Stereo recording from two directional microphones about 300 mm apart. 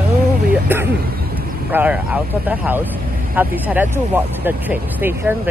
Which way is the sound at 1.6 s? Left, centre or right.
Centre.